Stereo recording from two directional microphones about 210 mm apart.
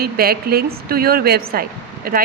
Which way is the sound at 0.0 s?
45° right (ahead or behind).